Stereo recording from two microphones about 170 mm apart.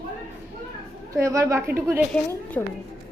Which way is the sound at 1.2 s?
20° right (ahead or behind).